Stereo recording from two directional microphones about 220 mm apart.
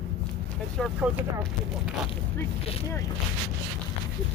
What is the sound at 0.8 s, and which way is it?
Speech, 10° right (ahead or behind).